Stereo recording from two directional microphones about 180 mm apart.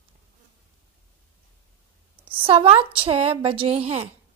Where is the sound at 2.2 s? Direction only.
30° right (ahead or behind).